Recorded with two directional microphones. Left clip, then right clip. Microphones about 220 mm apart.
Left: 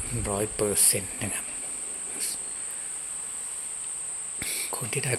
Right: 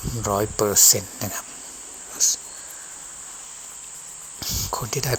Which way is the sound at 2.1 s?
20° right (ahead or behind).